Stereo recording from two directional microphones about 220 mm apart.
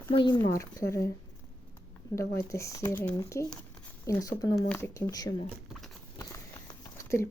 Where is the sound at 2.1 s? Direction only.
10° left (ahead or behind).